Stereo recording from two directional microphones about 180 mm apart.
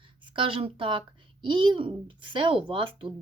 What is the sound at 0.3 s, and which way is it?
Speech, 30° right (ahead or behind).